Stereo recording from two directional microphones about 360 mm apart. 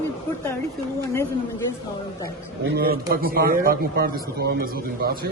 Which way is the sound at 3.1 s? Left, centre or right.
Right.